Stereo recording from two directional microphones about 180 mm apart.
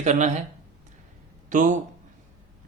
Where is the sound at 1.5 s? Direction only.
45° right (ahead or behind).